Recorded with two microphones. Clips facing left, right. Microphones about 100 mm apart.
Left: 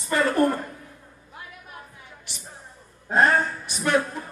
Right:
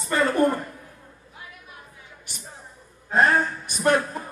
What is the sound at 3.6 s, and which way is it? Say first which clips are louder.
Music: right 4 dB; 45° right (ahead or behind).